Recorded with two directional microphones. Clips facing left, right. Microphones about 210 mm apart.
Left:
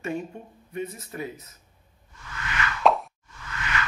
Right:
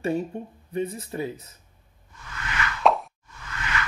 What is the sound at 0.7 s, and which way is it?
Speech, 30° right (ahead or behind).